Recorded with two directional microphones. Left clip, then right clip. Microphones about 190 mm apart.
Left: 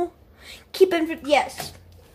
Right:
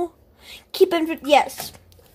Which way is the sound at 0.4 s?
10° right (ahead or behind).